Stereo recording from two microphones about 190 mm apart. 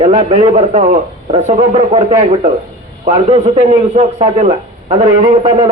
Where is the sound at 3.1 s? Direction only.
35° right (ahead or behind).